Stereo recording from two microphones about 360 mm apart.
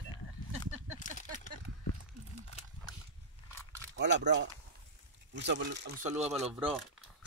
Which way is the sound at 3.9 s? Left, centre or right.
Right.